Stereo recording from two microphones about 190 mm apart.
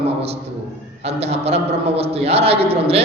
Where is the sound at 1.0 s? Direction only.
35° right (ahead or behind).